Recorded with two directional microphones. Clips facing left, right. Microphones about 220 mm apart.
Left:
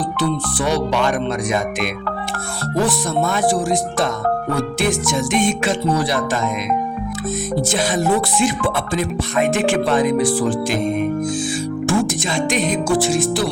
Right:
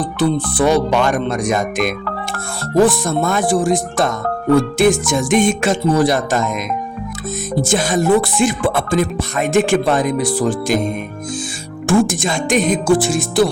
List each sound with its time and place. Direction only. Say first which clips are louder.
0.2 s music: right 7 dB; 50° right (ahead or behind)
7.7 s music: right 5 dB; 50° right (ahead or behind)
10.2 s speech: even; 40° right (ahead or behind)
11.9 s music: right 6 dB; 50° right (ahead or behind)